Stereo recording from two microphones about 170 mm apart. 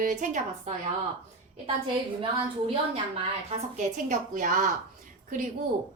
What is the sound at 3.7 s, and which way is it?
Speech, 45° right (ahead or behind).